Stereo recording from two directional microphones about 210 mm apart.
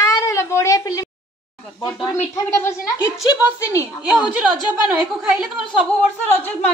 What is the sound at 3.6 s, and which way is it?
Speech, 15° left (ahead or behind).